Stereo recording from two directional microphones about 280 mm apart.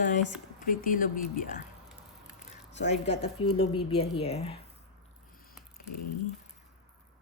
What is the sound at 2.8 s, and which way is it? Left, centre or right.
Speech, left.